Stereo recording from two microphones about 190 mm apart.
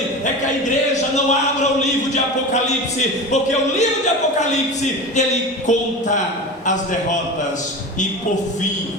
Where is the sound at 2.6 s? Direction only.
35° left (ahead or behind).